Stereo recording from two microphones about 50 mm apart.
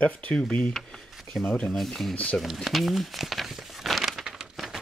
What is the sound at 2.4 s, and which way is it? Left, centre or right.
Crumpling, centre.